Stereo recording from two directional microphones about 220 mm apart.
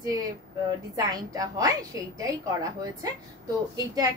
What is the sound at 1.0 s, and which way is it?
A woman's voice, 15° right (ahead or behind).